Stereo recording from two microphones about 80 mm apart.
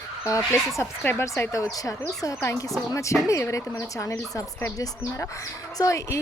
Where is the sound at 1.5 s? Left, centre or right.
Left.